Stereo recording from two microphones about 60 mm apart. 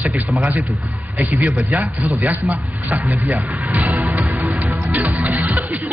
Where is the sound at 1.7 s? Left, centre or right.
Right.